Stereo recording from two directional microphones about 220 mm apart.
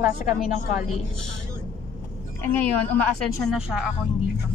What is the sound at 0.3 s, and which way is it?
Frog, centre (ahead or behind).